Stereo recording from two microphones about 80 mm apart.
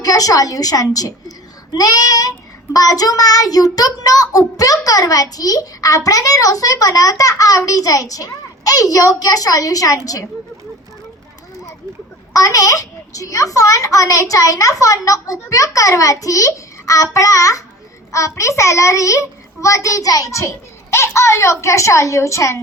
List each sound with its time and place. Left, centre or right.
0.0 s child singing: left
12.3 s child singing: left
18.1 s a child's voice: left